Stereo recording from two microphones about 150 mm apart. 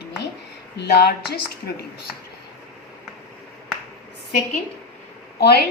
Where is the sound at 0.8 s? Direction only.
90° left.